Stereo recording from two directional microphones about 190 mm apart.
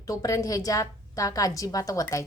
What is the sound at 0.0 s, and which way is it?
A woman's voice, 20° left (ahead or behind).